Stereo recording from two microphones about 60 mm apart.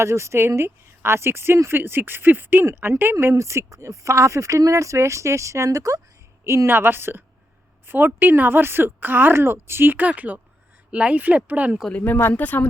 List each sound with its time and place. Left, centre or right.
0.0 s speech: right
2.6 s speech: right
6.4 s speech: right
12.0 s speech: left